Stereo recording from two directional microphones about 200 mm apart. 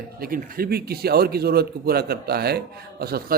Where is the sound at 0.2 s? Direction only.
45° right (ahead or behind).